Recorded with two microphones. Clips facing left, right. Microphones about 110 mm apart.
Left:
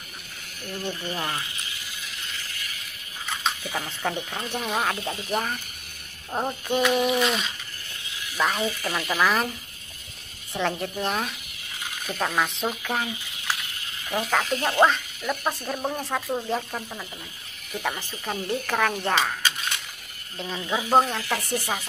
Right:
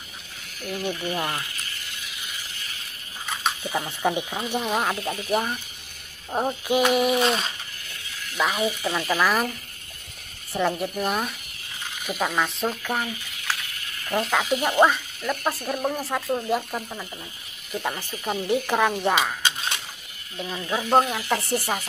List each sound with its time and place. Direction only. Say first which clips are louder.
0.8 s speech: right 3 dB; 15° right (ahead or behind)
1.8 s a sound: even; centre (ahead or behind)
3.6 s speech: right 4 dB; 15° right (ahead or behind)
7.2 s a sound: right 2 dB; 40° right (ahead or behind)
8.3 s speech: right 1 dB; 5° right (ahead or behind)
10.5 s speech: right 3 dB; 5° right (ahead or behind)
13.0 s a sound: even; 15° left (ahead or behind)
13.7 s a sound: even; 25° left (ahead or behind)
14.0 s speech: right 1 dB; 5° left (ahead or behind)
14.4 s speech: right 1 dB; 10° right (ahead or behind)
20.6 s speech: even; 10° left (ahead or behind)
20.9 s speech: even; centre (ahead or behind)
21.2 s speech: right 3 dB; 15° right (ahead or behind)